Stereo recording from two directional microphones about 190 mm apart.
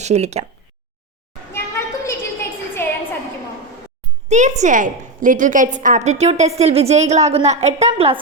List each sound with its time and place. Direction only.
0.0 s speech: 35° right (ahead or behind)
1.5 s a sound: 15° left (ahead or behind)
4.3 s a woman's voice: 40° right (ahead or behind)